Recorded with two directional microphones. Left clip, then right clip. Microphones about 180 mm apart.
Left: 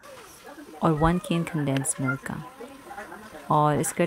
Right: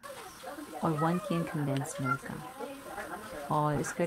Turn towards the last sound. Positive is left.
turn(degrees=35)  # may be behind; listen again after turning